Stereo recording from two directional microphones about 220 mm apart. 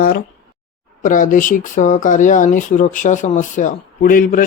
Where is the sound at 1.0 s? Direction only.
35° left (ahead or behind).